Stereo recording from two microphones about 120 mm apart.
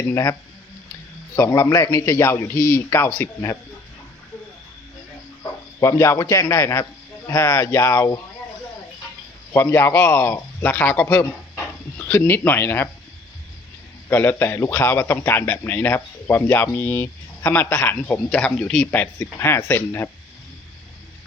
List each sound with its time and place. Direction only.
0.1 s a man's voice: 25° left (ahead or behind)
1.4 s a man's voice: 25° left (ahead or behind)
5.4 s a man's voice: 25° left (ahead or behind)
9.5 s a man's voice: 20° left (ahead or behind)
14.1 s a man's voice: 20° left (ahead or behind)